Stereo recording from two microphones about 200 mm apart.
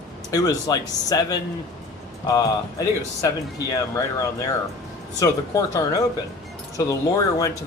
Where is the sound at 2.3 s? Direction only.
15° left (ahead or behind).